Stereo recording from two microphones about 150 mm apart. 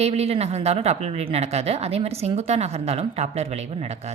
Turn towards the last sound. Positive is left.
turn(degrees=-45)  # may be behind; listen again after turning